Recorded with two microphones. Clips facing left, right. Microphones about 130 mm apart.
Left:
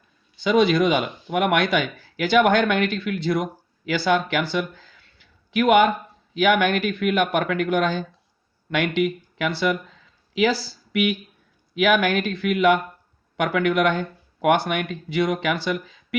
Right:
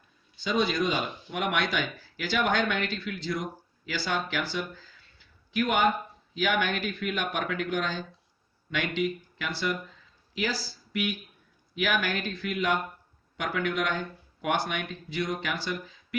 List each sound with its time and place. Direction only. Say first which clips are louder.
0.3 s speech: left 9 dB; 70° left (ahead or behind)